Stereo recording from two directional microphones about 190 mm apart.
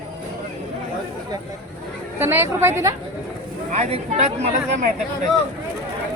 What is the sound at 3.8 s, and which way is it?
A woman's voice, 35° right (ahead or behind).